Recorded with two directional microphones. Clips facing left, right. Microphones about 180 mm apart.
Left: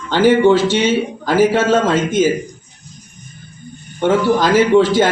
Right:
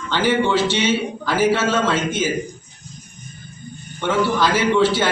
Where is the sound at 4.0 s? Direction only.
45° left (ahead or behind).